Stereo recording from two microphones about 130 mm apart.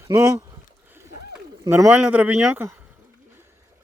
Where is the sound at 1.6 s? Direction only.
20° right (ahead or behind).